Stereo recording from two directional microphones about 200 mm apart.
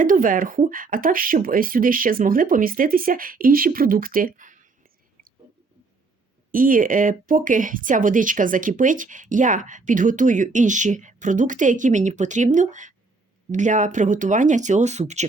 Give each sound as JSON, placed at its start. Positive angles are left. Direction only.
{"t": 0.0, "sound": "speech", "side_deg": -40}
{"t": 6.5, "sound": "speech", "side_deg": -45}